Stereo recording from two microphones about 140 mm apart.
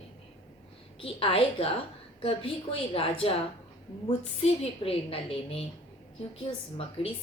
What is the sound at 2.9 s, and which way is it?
A woman's voice, 40° left (ahead or behind).